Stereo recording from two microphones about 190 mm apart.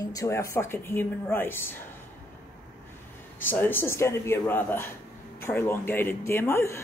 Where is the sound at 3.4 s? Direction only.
10° left (ahead or behind).